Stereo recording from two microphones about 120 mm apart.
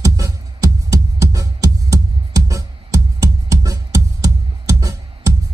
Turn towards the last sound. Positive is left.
turn(degrees=-25)  # may be behind; listen again after turning